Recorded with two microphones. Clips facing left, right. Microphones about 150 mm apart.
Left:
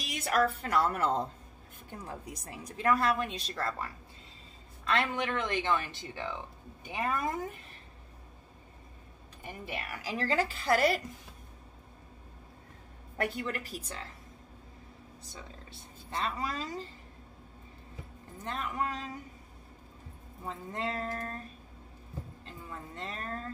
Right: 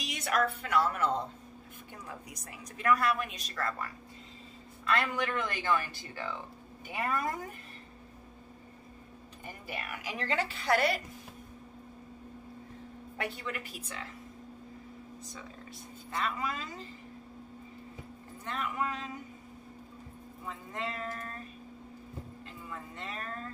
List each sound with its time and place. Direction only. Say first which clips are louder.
0.0 s a sound: left 2 dB; 40° left (ahead or behind)
0.7 s a woman's voice: even; 35° left (ahead or behind)
4.8 s speech: even; 25° left (ahead or behind)
10.0 s a woman's voice: left 3 dB; 35° left (ahead or behind)
13.2 s a woman's voice: left 4 dB; 45° left (ahead or behind)
15.7 s a woman's voice: even; 30° left (ahead or behind)
18.4 s a woman's voice: even; 35° left (ahead or behind)
20.4 s a woman's voice: left 3 dB; 35° left (ahead or behind)
22.7 s a woman's voice: left 1 dB; 35° left (ahead or behind)